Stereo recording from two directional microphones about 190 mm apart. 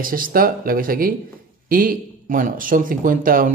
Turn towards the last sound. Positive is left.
turn(degrees=-45)  # may be behind; listen again after turning